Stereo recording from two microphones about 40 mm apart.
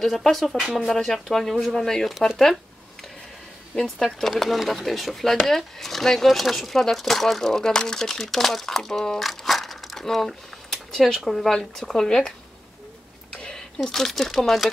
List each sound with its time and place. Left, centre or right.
0.0 s speech: centre
3.7 s speech: centre
9.3 s crushing: centre
10.0 s a sound: centre
11.2 s speech: centre
13.3 s a sound: left
13.9 s speech: centre